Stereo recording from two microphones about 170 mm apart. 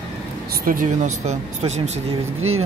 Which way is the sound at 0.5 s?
55° right (ahead or behind).